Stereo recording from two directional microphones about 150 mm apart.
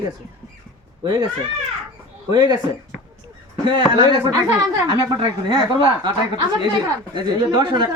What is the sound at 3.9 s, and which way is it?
Speech, 30° right (ahead or behind).